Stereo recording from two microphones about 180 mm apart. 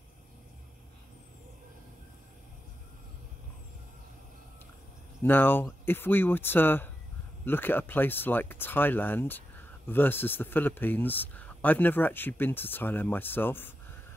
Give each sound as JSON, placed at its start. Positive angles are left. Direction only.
{"t": 5.2, "sound": "speech", "side_deg": 10}